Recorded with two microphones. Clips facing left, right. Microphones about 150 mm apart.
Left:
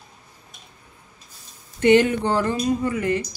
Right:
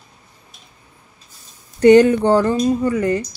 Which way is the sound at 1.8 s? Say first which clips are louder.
Right 6 dB; 35° right (ahead or behind).